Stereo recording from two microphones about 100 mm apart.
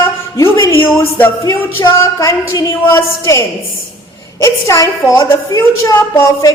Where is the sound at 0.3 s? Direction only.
30° left (ahead or behind).